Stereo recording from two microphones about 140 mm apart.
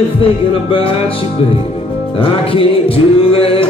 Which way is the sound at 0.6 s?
40° left (ahead or behind).